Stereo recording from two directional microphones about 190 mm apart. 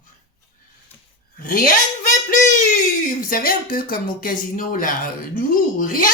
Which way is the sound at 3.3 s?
50° left (ahead or behind).